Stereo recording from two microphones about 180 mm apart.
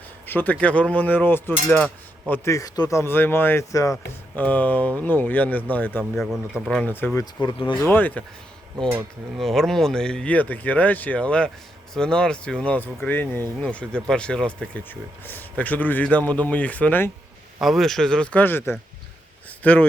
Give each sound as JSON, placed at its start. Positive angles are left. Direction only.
{"t": 0.3, "sound": "speech", "side_deg": 10}
{"t": 6.1, "sound": "speech", "side_deg": 0}
{"t": 7.4, "sound": "speech", "side_deg": 25}
{"t": 7.8, "sound": "speech", "side_deg": 10}